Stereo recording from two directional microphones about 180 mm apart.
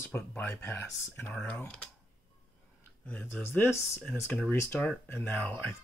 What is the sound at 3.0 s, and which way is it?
Speech, 10° left (ahead or behind).